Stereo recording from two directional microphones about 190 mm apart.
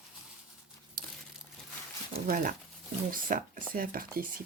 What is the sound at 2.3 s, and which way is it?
Speech, 45° right (ahead or behind).